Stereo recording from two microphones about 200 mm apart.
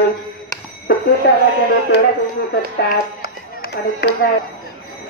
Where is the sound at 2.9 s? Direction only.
50° left (ahead or behind).